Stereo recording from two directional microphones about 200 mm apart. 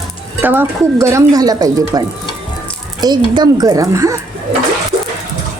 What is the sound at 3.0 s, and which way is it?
Speech, 20° right (ahead or behind).